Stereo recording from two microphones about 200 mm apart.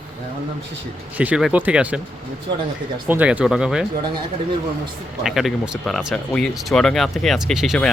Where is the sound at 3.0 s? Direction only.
5° right (ahead or behind).